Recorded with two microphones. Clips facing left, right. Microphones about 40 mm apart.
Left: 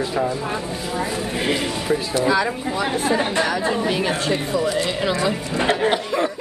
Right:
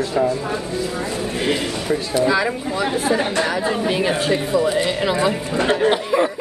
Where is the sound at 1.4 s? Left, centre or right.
Centre.